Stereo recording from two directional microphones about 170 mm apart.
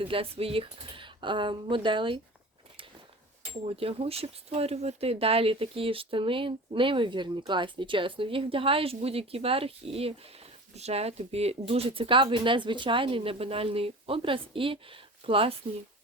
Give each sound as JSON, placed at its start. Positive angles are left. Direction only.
{"t": 0.0, "sound": "speech", "side_deg": -35}
{"t": 3.7, "sound": "speech", "side_deg": -35}